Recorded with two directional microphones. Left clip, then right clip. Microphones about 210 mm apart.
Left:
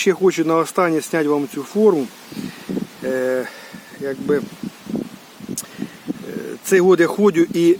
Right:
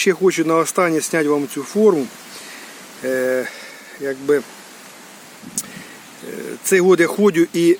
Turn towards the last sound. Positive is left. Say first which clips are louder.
# even
turn(degrees=5)  # may be behind; listen again after turning